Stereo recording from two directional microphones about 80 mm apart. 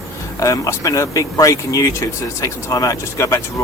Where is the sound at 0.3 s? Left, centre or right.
Left.